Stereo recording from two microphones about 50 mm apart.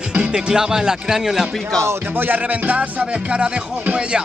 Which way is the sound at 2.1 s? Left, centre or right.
Right.